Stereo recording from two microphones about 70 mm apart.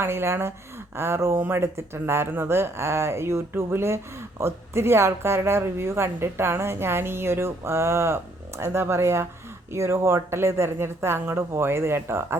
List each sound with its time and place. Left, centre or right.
0.0 s speech: right